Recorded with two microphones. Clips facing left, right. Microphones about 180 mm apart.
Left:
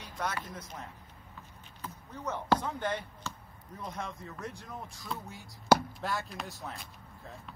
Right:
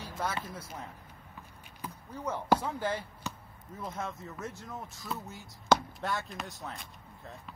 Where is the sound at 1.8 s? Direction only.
10° right (ahead or behind).